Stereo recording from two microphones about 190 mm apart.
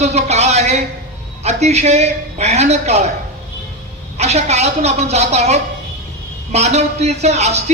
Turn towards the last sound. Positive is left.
turn(degrees=-35)  # may be behind; listen again after turning